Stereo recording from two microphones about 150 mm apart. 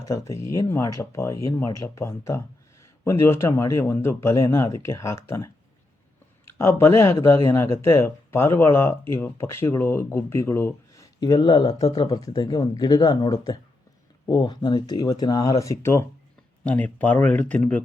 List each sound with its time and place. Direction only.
0.0 s speech: 20° left (ahead or behind)
11.2 s speech: 30° left (ahead or behind); by 17.8 s 10° left (ahead or behind)